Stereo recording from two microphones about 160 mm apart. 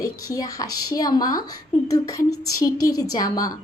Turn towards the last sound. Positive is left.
turn(degrees=20)  # may be behind; listen again after turning